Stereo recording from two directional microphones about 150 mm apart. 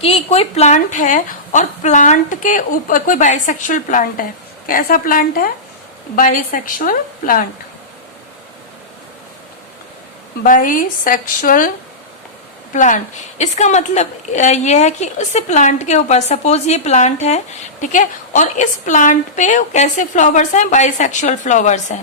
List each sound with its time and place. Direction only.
0.0 s a woman's voice: 40° left (ahead or behind); by 7.4 s 70° left (ahead or behind)
10.4 s speech: 65° left (ahead or behind)
12.7 s a woman's voice: 55° left (ahead or behind)